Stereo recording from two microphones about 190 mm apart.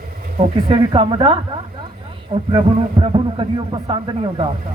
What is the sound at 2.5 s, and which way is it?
Speech, 25° right (ahead or behind).